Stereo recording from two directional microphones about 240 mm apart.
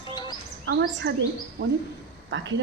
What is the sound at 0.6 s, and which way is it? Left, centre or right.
Speech, right.